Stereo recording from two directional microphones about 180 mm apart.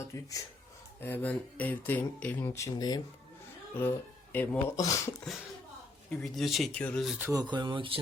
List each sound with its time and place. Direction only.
0.1 s speech: 20° left (ahead or behind)
3.8 s speech: 10° left (ahead or behind)
6.1 s speech: 5° left (ahead or behind)
7.3 s speech: 25° right (ahead or behind)